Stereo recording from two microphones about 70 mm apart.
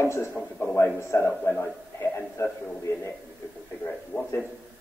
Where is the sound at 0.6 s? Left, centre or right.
Left.